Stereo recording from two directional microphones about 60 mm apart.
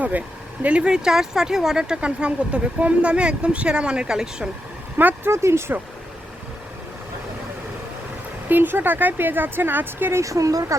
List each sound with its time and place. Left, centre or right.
0.0 s speech: right; by 4.4 s centre
4.9 s a sound: right
5.3 s speech: right
8.4 s speech: right
10.2 s speech: right